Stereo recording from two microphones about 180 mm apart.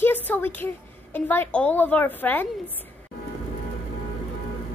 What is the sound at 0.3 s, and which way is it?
A woman's voice, 10° left (ahead or behind).